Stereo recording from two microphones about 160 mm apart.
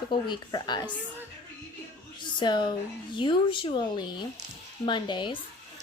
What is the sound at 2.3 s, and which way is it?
A child's voice, 30° left (ahead or behind).